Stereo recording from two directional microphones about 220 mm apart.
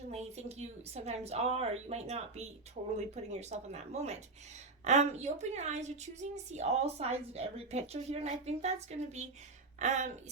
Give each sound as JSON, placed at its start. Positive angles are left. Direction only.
{"t": 0.1, "sound": "a woman's voice", "side_deg": -30}